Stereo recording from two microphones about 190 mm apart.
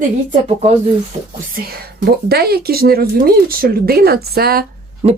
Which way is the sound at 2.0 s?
55° right (ahead or behind).